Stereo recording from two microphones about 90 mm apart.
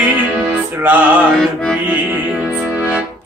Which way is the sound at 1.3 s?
5° left (ahead or behind).